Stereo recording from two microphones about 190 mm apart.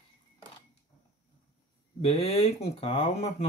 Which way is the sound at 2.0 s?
30° left (ahead or behind).